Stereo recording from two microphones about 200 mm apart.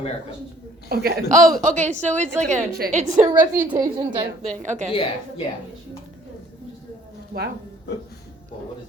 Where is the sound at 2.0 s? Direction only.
35° right (ahead or behind).